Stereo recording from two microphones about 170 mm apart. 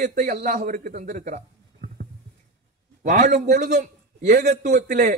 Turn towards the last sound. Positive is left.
turn(degrees=-45)  # may be behind; listen again after turning